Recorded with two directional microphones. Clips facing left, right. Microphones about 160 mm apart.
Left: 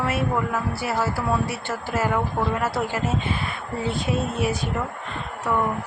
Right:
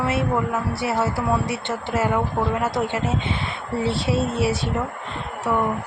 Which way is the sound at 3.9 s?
90° right.